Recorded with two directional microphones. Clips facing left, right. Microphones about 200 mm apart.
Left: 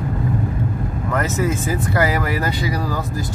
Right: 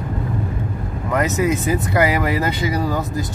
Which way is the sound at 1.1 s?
15° right (ahead or behind).